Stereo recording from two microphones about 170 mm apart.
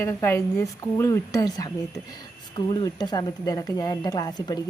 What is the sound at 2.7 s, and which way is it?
Speech, 25° left (ahead or behind).